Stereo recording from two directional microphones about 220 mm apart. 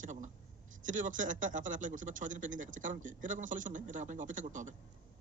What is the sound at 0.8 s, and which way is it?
A man's voice, 35° right (ahead or behind).